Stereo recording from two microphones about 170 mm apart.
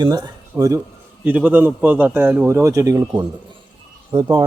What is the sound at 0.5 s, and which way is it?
A man's voice, 15° right (ahead or behind).